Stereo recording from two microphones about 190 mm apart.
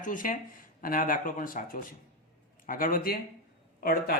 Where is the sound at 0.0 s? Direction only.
45° left (ahead or behind).